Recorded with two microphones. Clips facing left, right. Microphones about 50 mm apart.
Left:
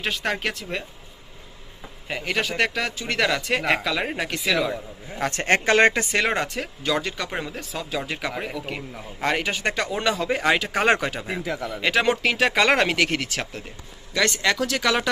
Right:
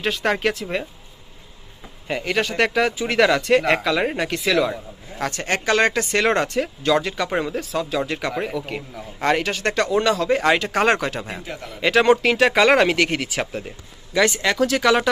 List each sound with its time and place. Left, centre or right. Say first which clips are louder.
0.0 s speech: right 5 dB; centre
2.0 s speech: right 3 dB; centre
5.3 s speech: left 2 dB; left
6.1 s speech: right 4 dB; centre
9.4 s speech: right 3 dB; centre